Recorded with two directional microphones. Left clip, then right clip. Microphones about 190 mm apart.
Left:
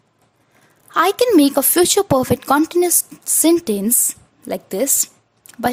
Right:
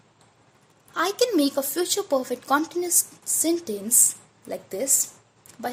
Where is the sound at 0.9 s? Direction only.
40° left (ahead or behind).